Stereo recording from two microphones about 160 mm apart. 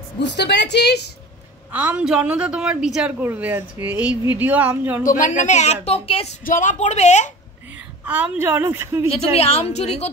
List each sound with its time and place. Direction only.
0.2 s a woman's voice: 90° left
1.7 s a woman's voice: 10° right (ahead or behind)
5.0 s a woman's voice: 55° left (ahead or behind); by 6.3 s 35° left (ahead or behind)
6.4 s a woman's voice: 55° left (ahead or behind)
8.0 s a woman's voice: 10° right (ahead or behind)
9.1 s a woman's voice: 40° left (ahead or behind)